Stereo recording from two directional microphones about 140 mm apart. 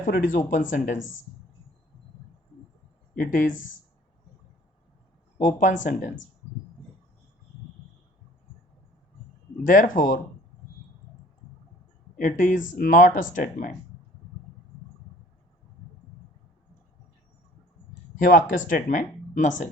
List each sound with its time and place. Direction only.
0.0 s speech: 75° left (ahead or behind)
3.2 s speech: 75° left (ahead or behind)
5.4 s speech: 65° left (ahead or behind)
9.6 s speech: 70° left (ahead or behind)
12.1 s speech: 70° left (ahead or behind)
18.1 s speech: 75° left (ahead or behind)